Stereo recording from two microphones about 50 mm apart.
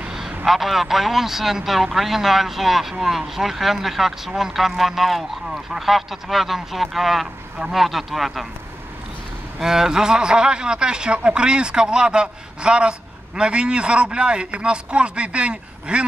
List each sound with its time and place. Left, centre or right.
0.5 s a man's voice: centre
9.6 s a man's voice: centre